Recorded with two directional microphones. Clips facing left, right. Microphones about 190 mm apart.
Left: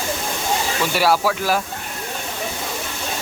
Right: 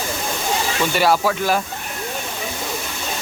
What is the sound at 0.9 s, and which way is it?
Speech, 5° left (ahead or behind).